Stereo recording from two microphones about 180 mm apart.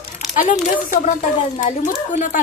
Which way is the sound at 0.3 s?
45° left (ahead or behind).